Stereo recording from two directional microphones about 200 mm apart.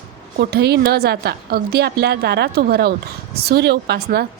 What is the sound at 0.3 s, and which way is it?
A woman's voice, 50° right (ahead or behind).